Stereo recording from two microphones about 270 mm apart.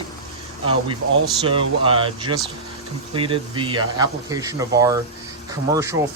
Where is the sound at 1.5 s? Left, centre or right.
Centre.